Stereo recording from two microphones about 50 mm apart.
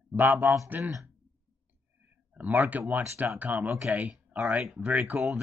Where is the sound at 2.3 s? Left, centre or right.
Right.